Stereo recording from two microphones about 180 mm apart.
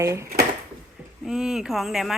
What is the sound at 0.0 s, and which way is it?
Speech, 15° right (ahead or behind).